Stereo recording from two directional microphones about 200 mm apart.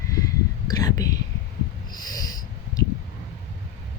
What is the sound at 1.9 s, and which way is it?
Snort, 20° left (ahead or behind).